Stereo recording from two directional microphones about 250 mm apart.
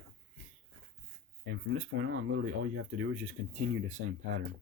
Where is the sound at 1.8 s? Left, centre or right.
Right.